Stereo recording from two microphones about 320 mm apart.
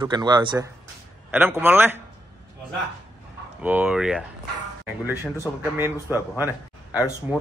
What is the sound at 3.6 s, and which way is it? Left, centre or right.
Speech, centre.